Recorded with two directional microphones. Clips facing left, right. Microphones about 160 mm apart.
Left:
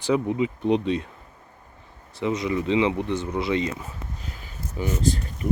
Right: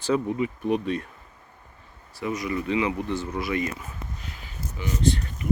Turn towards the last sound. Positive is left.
turn(degrees=40)  # may be behind; listen again after turning